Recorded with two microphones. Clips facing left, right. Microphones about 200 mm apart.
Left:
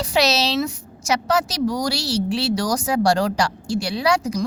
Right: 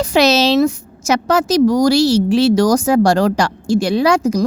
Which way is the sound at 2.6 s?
45° right (ahead or behind).